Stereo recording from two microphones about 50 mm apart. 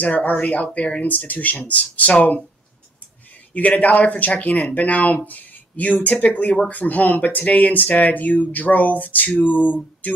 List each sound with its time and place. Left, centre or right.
0.0 s speech: left
3.5 s speech: left
9.7 s a sound: left